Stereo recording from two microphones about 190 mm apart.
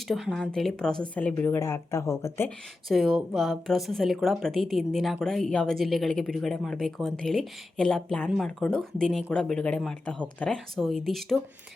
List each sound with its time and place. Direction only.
0.1 s speech: centre (ahead or behind)
2.9 s speech: centre (ahead or behind)